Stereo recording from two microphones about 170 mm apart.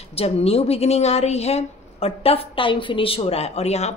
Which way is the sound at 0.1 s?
35° left (ahead or behind).